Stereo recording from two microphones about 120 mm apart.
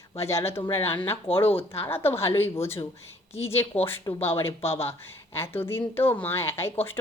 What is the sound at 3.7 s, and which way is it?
A woman's voice, 15° left (ahead or behind).